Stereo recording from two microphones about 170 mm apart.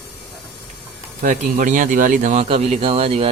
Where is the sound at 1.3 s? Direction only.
50° right (ahead or behind).